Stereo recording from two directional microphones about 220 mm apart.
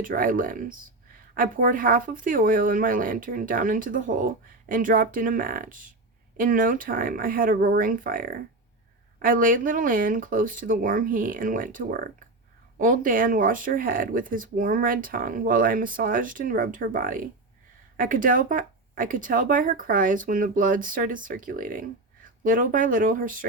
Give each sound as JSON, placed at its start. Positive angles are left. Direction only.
{"t": 0.0, "sound": "speech", "side_deg": -40}